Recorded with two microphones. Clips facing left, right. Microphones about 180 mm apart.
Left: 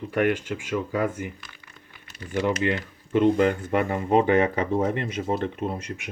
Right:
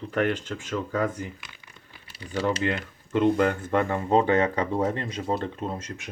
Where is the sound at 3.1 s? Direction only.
15° left (ahead or behind).